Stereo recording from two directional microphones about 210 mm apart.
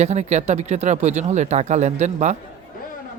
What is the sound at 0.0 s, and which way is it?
Speech, 30° right (ahead or behind).